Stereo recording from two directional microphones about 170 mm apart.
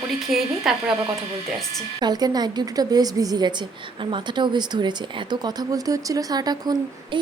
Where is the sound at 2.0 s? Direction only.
25° right (ahead or behind).